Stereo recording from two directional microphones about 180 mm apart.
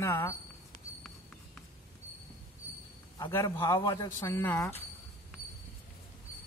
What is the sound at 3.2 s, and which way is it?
Speech, 15° left (ahead or behind).